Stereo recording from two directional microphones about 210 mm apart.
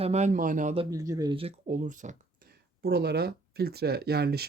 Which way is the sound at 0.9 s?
15° right (ahead or behind).